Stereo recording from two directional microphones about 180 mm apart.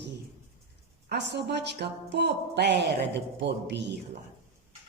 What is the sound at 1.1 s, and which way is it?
Speech, 70° right (ahead or behind).